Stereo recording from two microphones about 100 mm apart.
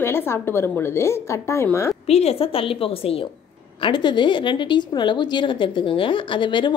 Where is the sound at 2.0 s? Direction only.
90° left; by 3.2 s 70° left (ahead or behind).